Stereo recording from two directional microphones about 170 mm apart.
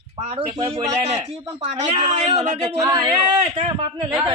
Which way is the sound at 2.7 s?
20° right (ahead or behind).